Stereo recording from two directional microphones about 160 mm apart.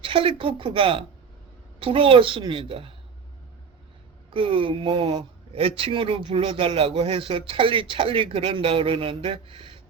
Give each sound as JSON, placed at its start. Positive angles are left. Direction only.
{"t": 0.0, "sound": "speech", "side_deg": -35}
{"t": 4.3, "sound": "speech", "side_deg": -35}